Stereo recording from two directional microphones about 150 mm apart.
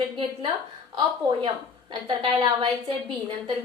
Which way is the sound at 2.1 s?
30° right (ahead or behind).